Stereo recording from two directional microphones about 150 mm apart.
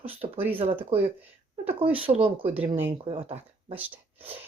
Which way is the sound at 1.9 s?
40° right (ahead or behind).